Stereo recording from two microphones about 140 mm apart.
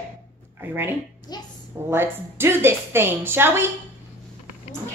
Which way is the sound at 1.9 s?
15° right (ahead or behind).